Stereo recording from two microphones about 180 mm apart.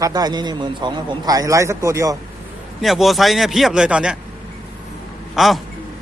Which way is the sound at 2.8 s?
Centre (ahead or behind).